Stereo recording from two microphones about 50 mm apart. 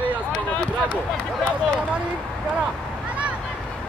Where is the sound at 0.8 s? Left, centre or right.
Centre.